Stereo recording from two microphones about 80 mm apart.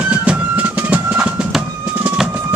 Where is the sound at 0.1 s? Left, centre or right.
Centre.